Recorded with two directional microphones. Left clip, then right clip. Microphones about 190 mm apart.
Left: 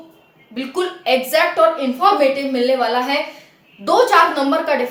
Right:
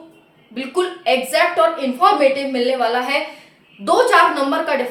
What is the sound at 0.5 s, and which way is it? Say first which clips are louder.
A woman's voice: right 1 dB; 5° right (ahead or behind).